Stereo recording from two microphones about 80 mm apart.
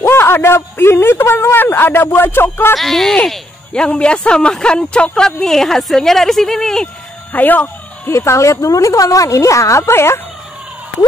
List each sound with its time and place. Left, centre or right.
0.0 s a man's voice: left
2.7 s speech: centre
7.3 s speech: left
8.1 s a woman's voice: left